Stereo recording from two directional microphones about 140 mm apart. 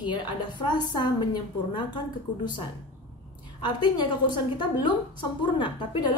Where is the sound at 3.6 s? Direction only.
30° left (ahead or behind).